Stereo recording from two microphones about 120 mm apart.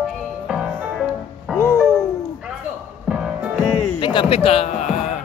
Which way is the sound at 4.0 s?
45° left (ahead or behind).